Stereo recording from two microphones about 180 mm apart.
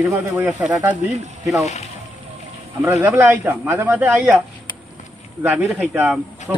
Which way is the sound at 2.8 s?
15° right (ahead or behind).